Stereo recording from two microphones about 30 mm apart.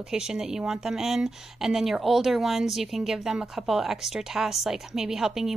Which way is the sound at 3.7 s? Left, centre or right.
Centre.